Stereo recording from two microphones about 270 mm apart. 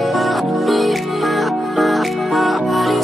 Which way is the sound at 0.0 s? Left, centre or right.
Centre.